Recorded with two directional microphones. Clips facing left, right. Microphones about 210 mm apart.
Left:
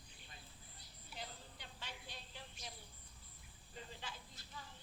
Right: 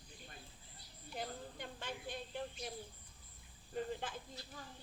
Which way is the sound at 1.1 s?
50° right (ahead or behind).